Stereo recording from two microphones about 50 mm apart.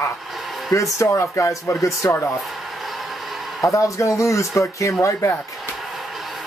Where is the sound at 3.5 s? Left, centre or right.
Left.